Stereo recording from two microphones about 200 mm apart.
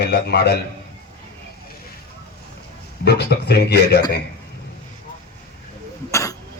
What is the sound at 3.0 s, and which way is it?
A man's voice, 55° left (ahead or behind).